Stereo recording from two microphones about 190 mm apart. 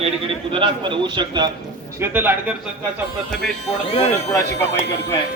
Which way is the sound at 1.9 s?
10° right (ahead or behind).